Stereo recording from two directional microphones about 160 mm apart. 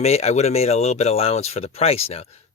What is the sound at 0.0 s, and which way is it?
Speech, 40° left (ahead or behind).